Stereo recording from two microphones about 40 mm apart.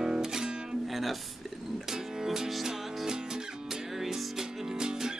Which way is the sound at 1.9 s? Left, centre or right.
Centre.